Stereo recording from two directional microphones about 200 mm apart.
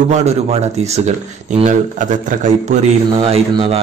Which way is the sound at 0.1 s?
35° right (ahead or behind).